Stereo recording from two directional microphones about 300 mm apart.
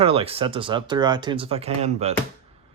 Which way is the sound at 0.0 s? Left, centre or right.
Centre.